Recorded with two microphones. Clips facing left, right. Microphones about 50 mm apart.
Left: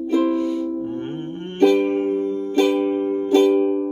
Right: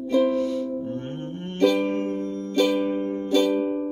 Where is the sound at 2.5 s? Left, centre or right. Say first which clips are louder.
Left 3 dB; left.